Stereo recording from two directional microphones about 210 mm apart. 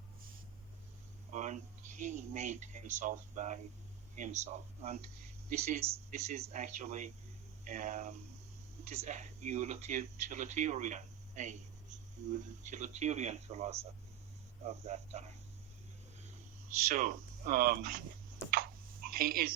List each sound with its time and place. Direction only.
1.3 s speech: 35° right (ahead or behind)
16.9 s speech: 40° right (ahead or behind)
18.5 s a sound: 45° right (ahead or behind)